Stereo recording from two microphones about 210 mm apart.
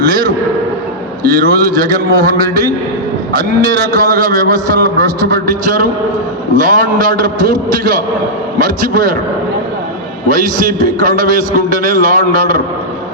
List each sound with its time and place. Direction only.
0.0 s a man's voice: 45° right (ahead or behind)
3.9 s a man's voice: 45° right (ahead or behind)
10.2 s a man's voice: 40° right (ahead or behind)